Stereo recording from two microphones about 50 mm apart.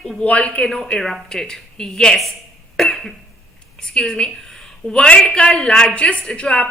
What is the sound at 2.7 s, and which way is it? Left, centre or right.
Cough, centre.